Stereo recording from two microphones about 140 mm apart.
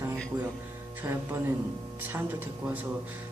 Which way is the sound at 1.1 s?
25° right (ahead or behind).